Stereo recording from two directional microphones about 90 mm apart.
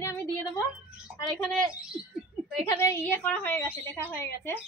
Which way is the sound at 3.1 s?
15° left (ahead or behind).